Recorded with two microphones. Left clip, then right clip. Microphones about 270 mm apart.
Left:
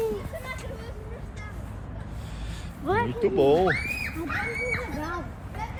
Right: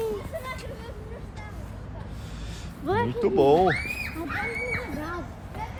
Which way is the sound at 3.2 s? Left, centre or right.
Right.